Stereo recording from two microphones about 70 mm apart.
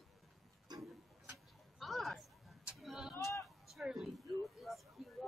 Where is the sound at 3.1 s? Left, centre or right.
Left.